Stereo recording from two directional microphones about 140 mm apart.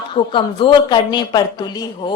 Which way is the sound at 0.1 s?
35° left (ahead or behind).